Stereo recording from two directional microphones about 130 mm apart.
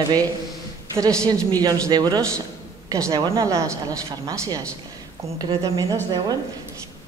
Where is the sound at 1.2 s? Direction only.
30° right (ahead or behind).